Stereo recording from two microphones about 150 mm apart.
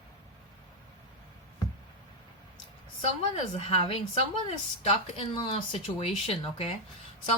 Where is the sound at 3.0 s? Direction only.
45° left (ahead or behind).